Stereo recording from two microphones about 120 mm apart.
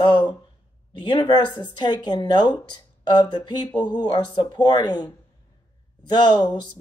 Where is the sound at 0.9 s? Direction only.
40° left (ahead or behind).